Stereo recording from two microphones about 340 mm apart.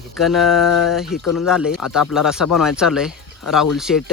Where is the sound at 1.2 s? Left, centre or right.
Left.